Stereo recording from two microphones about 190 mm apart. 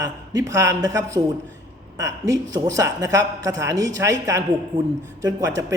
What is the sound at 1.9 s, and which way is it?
Speech, 20° right (ahead or behind).